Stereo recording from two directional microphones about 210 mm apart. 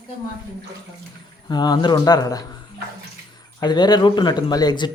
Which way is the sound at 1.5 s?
20° left (ahead or behind).